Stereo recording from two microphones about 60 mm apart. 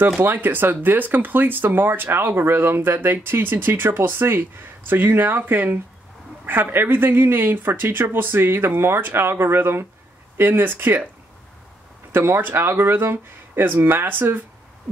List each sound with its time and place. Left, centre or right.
0.2 s speech: right
12.1 s speech: right